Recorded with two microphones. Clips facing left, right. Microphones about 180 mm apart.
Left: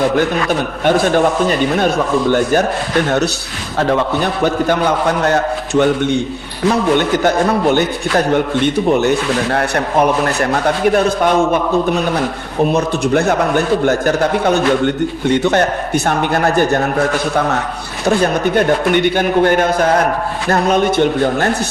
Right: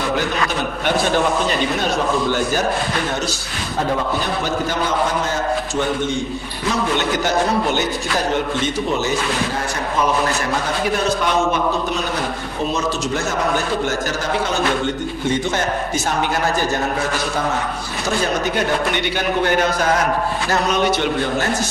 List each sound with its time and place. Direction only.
0.9 s a man's voice: 45° left (ahead or behind)
4.7 s a man's voice: 65° left (ahead or behind)
12.7 s a man's voice: 60° left (ahead or behind)
18.0 s a man's voice: 55° left (ahead or behind)